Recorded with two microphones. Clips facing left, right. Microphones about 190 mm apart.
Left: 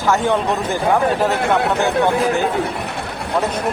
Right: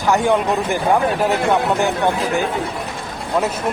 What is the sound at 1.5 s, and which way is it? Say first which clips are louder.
Speech: left 1 dB; 65° left (ahead or behind).